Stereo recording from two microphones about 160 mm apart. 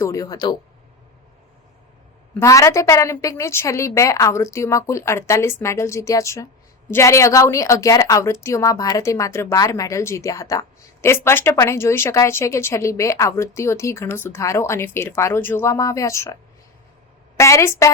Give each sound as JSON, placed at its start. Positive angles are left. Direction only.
{"t": 0.0, "sound": "speech", "side_deg": 20}
{"t": 2.4, "sound": "a woman's voice", "side_deg": 20}